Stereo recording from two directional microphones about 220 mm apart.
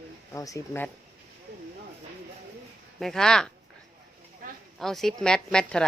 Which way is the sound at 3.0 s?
Centre (ahead or behind).